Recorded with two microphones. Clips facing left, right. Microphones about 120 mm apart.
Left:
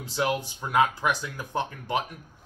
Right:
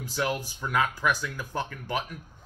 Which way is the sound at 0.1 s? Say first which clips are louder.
Left 3 dB; 25° left (ahead or behind).